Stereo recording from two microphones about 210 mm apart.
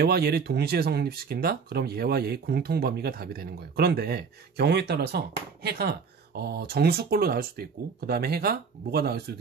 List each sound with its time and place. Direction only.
0.0 s speech: 50° right (ahead or behind)